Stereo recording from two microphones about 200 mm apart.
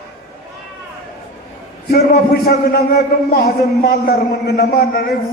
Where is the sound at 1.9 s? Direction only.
50° left (ahead or behind).